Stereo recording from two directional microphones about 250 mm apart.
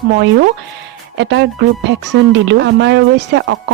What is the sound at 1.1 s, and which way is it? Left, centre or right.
Speech, right.